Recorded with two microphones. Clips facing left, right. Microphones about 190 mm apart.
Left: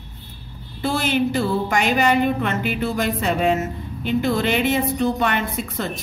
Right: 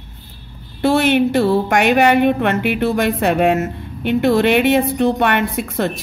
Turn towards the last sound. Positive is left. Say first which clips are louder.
# right 6 dB
turn(degrees=-65)  # may be behind; listen again after turning